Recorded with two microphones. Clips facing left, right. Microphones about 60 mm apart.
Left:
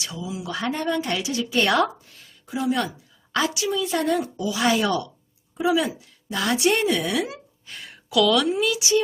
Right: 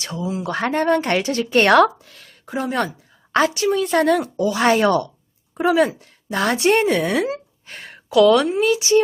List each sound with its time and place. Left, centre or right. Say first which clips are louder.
0.0 s speech: right 6 dB; right
2.5 s speech: right 2 dB; right
4.4 s a woman's voice: right 5 dB; right